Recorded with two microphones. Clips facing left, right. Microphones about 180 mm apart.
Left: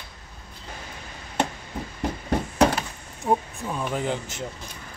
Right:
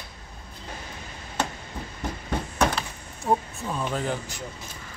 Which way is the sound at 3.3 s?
5° left (ahead or behind).